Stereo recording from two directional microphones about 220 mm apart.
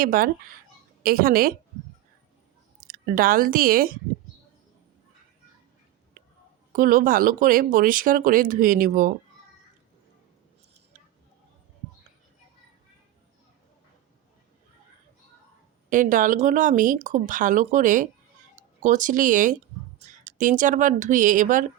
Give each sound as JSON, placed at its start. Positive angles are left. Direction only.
{"t": 0.0, "sound": "speech", "side_deg": -40}
{"t": 2.8, "sound": "speech", "side_deg": -40}
{"t": 6.7, "sound": "speech", "side_deg": -40}
{"t": 15.9, "sound": "speech", "side_deg": -35}